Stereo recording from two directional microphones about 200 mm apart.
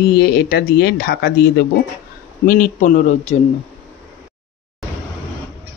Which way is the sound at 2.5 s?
40° left (ahead or behind).